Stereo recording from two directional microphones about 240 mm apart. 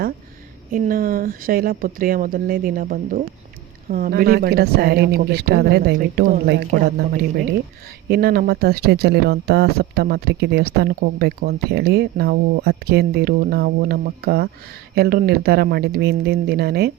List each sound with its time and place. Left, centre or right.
0.7 s speech: right
8.1 s speech: right